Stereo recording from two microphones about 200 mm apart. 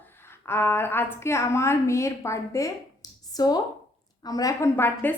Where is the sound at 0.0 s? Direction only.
10° left (ahead or behind).